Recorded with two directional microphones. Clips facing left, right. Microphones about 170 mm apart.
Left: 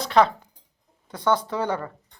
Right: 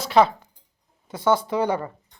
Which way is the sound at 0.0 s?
5° right (ahead or behind).